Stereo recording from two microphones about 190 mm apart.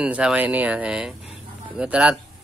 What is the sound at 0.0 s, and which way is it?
Speech, 5° right (ahead or behind).